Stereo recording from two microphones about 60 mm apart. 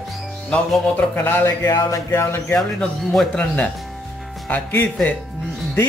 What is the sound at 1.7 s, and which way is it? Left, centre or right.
Speech, left.